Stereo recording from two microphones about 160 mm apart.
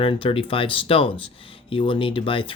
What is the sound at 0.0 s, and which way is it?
Speech, 35° left (ahead or behind).